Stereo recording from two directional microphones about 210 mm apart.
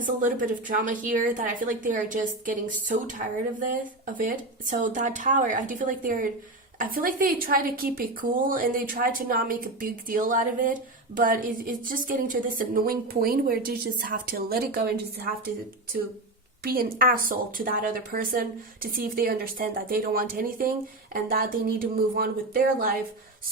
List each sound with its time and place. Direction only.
0.0 s a woman's voice: 40° right (ahead or behind)
16.6 s a woman's voice: 45° right (ahead or behind)